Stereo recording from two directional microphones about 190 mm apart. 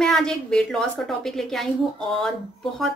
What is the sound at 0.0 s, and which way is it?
Speech, centre (ahead or behind).